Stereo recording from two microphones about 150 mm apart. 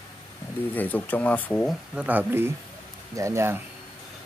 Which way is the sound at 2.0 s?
10° right (ahead or behind).